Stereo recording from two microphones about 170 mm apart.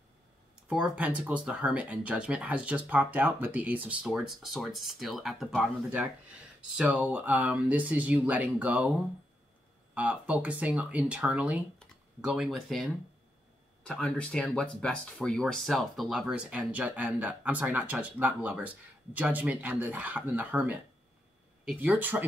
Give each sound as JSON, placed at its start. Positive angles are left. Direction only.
{"t": 0.7, "sound": "speech", "side_deg": -5}
{"t": 9.9, "sound": "speech", "side_deg": -10}